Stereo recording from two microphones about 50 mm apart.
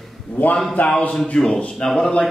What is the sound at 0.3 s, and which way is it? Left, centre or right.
Speech, left.